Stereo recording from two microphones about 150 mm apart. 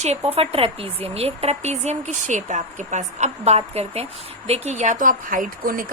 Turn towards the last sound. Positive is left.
turn(degrees=-70)  # may be behind; listen again after turning